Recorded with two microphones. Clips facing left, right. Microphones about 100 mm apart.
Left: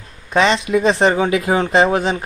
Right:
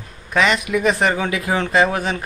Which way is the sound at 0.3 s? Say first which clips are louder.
Left 3 dB; 30° left (ahead or behind).